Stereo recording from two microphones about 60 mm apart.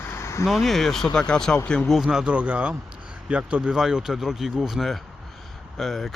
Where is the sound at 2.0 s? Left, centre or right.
Centre.